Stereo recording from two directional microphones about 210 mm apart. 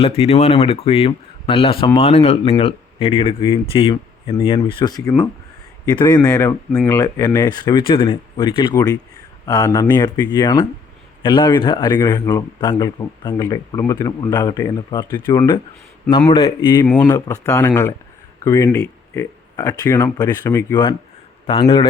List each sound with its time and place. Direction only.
0.0 s a man's voice: 30° left (ahead or behind)